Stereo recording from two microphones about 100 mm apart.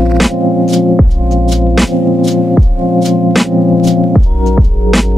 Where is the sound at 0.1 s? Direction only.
Centre (ahead or behind).